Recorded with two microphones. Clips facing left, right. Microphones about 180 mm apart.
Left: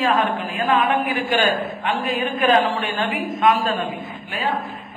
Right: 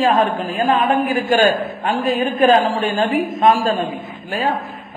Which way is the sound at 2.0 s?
35° right (ahead or behind).